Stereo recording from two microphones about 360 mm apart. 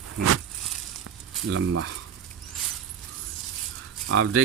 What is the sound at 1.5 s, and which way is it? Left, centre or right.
Speech, right.